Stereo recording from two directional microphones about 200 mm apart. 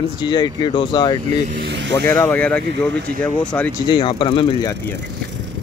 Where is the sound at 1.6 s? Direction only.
60° right (ahead or behind).